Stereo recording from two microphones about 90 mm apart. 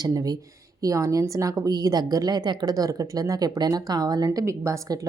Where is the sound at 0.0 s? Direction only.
45° right (ahead or behind).